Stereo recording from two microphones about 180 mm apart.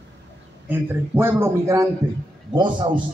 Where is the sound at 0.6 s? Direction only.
10° right (ahead or behind).